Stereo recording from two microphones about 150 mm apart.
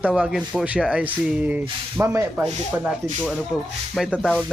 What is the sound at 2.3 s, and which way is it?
Speech, 5° right (ahead or behind).